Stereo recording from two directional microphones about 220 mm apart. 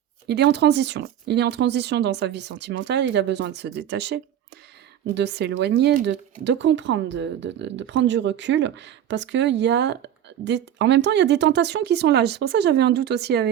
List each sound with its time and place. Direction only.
0.3 s speech: 50° right (ahead or behind)